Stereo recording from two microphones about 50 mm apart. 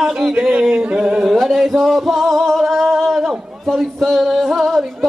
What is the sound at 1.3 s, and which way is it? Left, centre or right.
Singing, centre.